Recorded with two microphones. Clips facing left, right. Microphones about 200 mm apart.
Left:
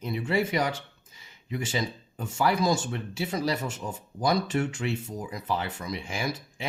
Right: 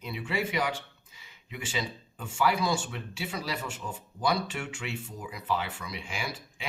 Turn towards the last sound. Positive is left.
turn(degrees=45)  # may be behind; listen again after turning